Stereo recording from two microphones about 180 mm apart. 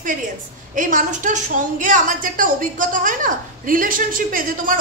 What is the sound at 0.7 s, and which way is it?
A woman's voice, 45° right (ahead or behind).